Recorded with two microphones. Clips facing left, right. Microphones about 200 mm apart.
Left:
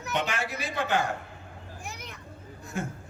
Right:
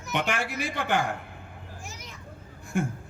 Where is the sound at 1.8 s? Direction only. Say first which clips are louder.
Left 4 dB; 60° left (ahead or behind).